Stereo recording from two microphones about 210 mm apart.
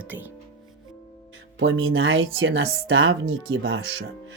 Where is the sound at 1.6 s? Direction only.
75° right (ahead or behind).